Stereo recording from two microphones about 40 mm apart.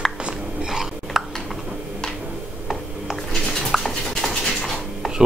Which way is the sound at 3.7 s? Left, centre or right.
Centre.